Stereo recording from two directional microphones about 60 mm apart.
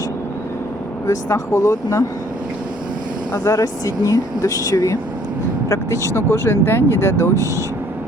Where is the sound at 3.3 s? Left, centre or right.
Left.